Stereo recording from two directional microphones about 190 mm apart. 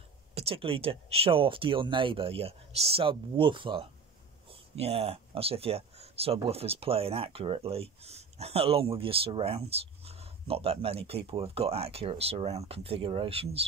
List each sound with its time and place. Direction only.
0.3 s speech: 30° right (ahead or behind)